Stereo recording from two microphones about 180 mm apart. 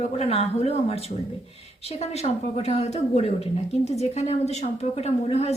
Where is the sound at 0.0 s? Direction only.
35° left (ahead or behind).